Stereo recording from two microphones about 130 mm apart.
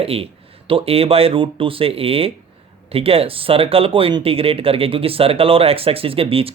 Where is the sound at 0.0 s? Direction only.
50° right (ahead or behind).